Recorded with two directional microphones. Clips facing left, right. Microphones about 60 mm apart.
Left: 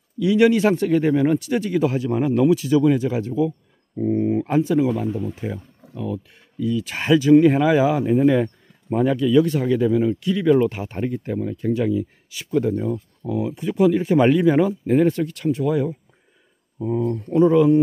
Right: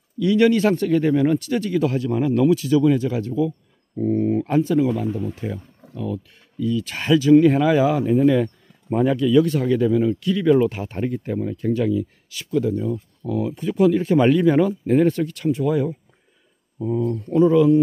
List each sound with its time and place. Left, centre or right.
0.2 s speech: centre
8.9 s speech: centre
11.8 s speech: centre
12.5 s speech: left
13.2 s speech: centre
16.8 s speech: left